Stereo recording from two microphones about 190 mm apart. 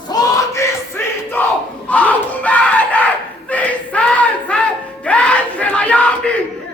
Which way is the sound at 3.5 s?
5° left (ahead or behind).